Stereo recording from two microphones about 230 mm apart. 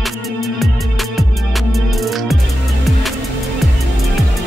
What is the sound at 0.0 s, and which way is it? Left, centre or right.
Music, centre.